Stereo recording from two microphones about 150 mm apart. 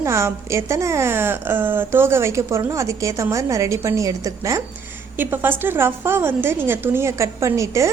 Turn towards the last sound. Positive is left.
turn(degrees=-20)  # may be behind; listen again after turning